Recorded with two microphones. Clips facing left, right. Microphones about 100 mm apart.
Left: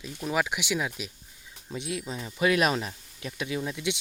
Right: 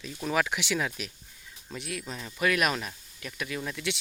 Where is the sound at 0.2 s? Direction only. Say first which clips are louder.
Even; 10° left (ahead or behind).